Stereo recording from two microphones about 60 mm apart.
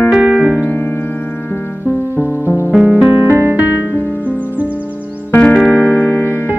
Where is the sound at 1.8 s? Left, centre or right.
Right.